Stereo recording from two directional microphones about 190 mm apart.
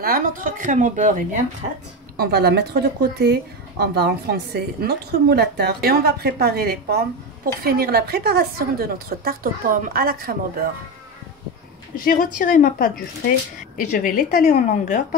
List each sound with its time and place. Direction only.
0.0 s a woman's voice: 45° right (ahead or behind)
2.1 s a woman's voice: 55° right (ahead or behind)
12.0 s speech: 50° left (ahead or behind)